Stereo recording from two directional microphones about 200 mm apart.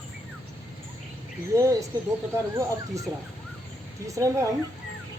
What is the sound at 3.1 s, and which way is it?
Speech, 15° right (ahead or behind).